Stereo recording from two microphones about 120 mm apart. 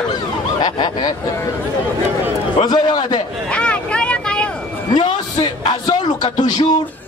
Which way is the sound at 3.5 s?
10° left (ahead or behind).